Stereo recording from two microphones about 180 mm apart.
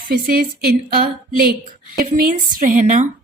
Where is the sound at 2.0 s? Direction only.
50° right (ahead or behind).